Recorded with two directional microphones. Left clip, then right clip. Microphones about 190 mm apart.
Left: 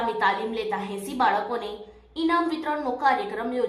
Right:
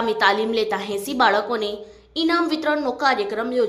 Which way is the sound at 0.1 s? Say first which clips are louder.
Right 6 dB; 20° right (ahead or behind).